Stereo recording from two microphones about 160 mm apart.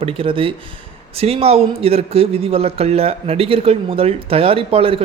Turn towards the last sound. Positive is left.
turn(degrees=-35)  # may be behind; listen again after turning